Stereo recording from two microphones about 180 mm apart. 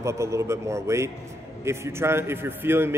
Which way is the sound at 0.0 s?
15° right (ahead or behind).